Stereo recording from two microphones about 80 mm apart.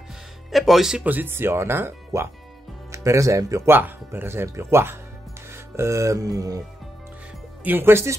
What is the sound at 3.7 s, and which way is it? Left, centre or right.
Speech, right.